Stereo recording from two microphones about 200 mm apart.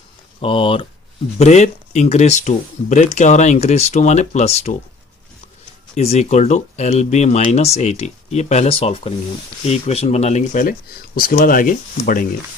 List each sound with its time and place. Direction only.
0.4 s speech: 25° left (ahead or behind)
6.0 s speech: 35° left (ahead or behind)